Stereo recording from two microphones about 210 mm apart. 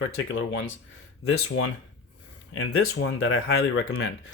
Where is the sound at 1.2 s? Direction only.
80° left.